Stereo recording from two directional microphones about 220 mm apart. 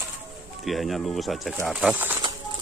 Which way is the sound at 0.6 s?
Centre (ahead or behind).